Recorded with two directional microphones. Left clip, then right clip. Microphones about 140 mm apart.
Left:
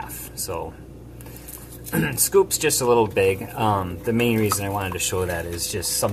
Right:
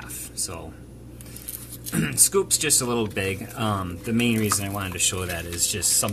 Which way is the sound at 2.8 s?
25° right (ahead or behind).